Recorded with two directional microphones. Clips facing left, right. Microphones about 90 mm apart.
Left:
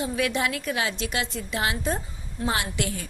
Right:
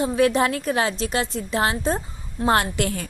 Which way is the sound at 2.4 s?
50° right (ahead or behind).